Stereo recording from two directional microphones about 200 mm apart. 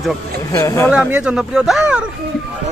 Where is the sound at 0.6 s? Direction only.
15° left (ahead or behind).